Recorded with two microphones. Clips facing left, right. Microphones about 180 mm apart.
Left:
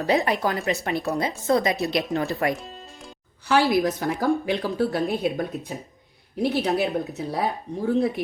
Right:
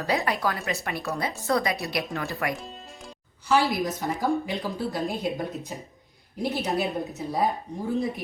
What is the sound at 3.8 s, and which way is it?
Speech, 70° left (ahead or behind).